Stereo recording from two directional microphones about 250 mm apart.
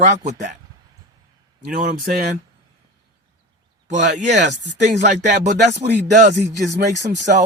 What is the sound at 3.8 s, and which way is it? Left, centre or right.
Speech, right.